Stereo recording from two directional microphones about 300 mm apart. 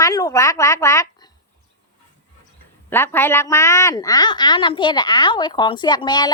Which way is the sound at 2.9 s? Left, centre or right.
Centre.